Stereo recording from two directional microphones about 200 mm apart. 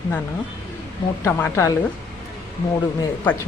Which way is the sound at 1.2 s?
10° left (ahead or behind).